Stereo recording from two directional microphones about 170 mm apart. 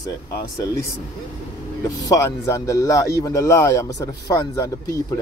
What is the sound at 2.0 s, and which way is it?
Speech, 20° left (ahead or behind).